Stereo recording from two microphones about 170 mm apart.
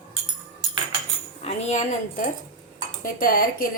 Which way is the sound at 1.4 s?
40° left (ahead or behind).